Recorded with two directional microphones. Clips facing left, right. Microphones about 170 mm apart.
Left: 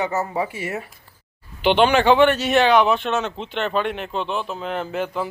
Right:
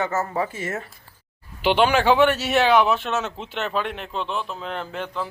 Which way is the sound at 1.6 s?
5° right (ahead or behind).